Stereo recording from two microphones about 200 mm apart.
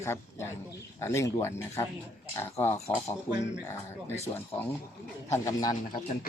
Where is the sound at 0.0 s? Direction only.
15° left (ahead or behind).